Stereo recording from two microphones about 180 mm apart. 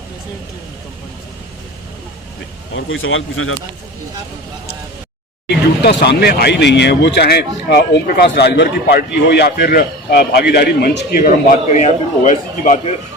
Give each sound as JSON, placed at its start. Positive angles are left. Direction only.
{"t": 2.7, "sound": "a man's voice", "side_deg": 90}
{"t": 5.5, "sound": "speech", "side_deg": 65}
{"t": 11.7, "sound": "a man's voice", "side_deg": 45}